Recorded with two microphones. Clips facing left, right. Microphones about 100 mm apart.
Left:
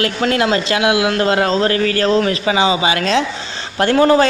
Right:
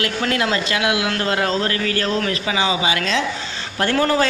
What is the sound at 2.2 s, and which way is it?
Speech, 25° left (ahead or behind).